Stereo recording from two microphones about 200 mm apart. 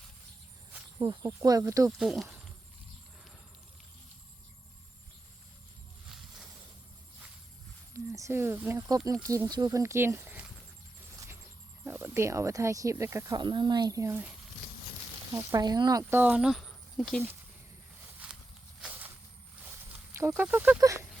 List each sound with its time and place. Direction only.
1.0 s speech: 25° right (ahead or behind)
2.0 s speech: centre (ahead or behind)
2.2 s a sound: 5° right (ahead or behind)
7.9 s speech: 15° right (ahead or behind)
11.9 s speech: 10° right (ahead or behind)
15.4 s speech: 20° right (ahead or behind); by 17.2 s centre (ahead or behind)
18.2 s walk: 5° right (ahead or behind)
18.8 s a sound: 10° right (ahead or behind)
20.1 s speech: 10° right (ahead or behind)